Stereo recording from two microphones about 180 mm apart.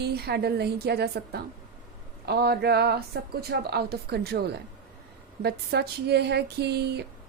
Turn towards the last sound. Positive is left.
turn(degrees=-65)  # may be behind; listen again after turning